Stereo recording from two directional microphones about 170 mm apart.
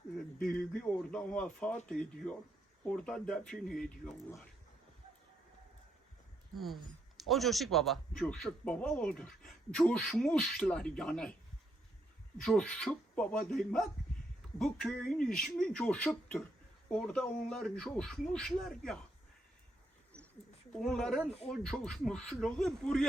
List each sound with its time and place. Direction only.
0.3 s a sound: 55° left (ahead or behind)
0.7 s speech: 5° left (ahead or behind)
7.2 s speech: centre (ahead or behind)
12.4 s speech: 5° left (ahead or behind)
20.1 s a sound: 5° left (ahead or behind)
20.7 s speech: 5° left (ahead or behind)